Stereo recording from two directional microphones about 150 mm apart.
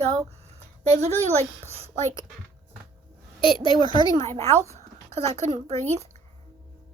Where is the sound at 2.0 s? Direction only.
20° left (ahead or behind).